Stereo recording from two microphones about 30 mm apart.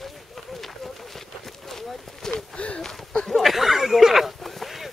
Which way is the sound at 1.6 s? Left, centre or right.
Centre.